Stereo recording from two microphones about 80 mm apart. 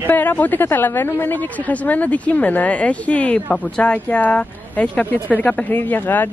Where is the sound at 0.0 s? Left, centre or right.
Left.